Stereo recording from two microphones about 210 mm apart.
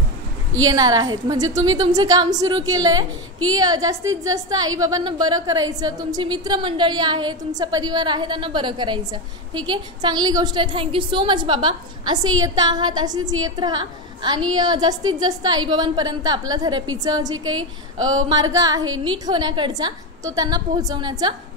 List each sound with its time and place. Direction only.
0.7 s a woman's voice: 20° right (ahead or behind)
17.5 s a woman's voice: 75° right (ahead or behind)
18.3 s speech: 15° right (ahead or behind)